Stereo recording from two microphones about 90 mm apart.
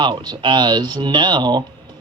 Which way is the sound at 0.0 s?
60° right (ahead or behind).